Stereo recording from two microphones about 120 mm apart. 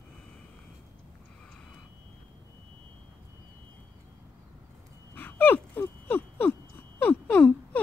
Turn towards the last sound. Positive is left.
turn(degrees=15)  # may be behind; listen again after turning